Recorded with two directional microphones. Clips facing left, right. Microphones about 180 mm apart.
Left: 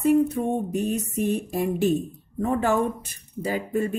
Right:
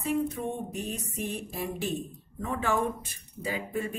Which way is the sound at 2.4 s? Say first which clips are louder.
Left 6 dB; 40° left (ahead or behind).